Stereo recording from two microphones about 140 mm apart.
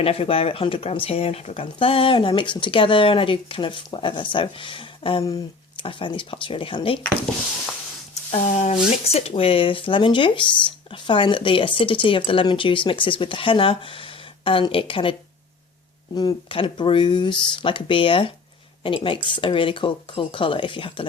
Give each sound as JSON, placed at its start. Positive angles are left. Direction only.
{"t": 0.0, "sound": "speech", "side_deg": 45}
{"t": 8.3, "sound": "speech", "side_deg": 55}
{"t": 16.1, "sound": "speech", "side_deg": 35}